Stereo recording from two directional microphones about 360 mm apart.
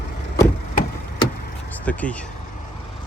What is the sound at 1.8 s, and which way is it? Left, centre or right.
Speech, centre.